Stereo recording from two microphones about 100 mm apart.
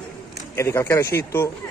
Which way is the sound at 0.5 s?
25° left (ahead or behind).